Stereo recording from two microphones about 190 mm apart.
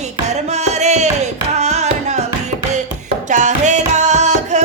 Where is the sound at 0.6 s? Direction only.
35° right (ahead or behind).